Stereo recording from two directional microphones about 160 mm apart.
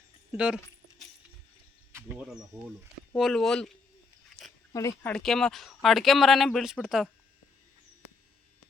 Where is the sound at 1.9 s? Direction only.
15° right (ahead or behind); by 3.7 s 5° left (ahead or behind).